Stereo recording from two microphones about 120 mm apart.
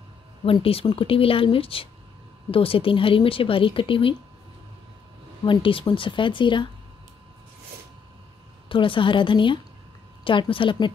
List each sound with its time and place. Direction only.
0.5 s a woman's voice: 50° left (ahead or behind)
5.4 s a woman's voice: 45° left (ahead or behind)
8.6 s a woman's voice: 45° left (ahead or behind)